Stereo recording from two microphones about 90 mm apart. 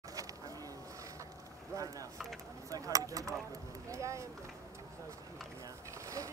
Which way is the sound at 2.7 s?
40° right (ahead or behind).